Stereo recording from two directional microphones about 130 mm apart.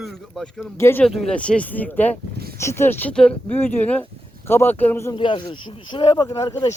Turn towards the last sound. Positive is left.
turn(degrees=25)  # may be behind; listen again after turning